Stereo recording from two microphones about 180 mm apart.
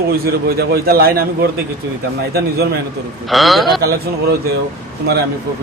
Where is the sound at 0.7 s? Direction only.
60° right (ahead or behind).